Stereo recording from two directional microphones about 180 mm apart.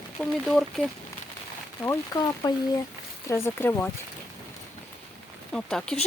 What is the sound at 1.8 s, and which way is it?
Speech, 20° left (ahead or behind).